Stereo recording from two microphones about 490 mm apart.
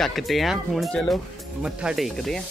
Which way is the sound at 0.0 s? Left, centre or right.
Centre.